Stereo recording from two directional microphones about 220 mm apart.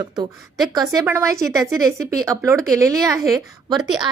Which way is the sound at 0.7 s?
15° right (ahead or behind).